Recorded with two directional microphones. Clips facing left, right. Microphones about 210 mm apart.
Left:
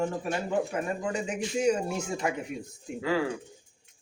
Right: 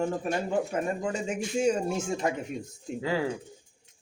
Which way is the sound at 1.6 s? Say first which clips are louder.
Even; 25° right (ahead or behind).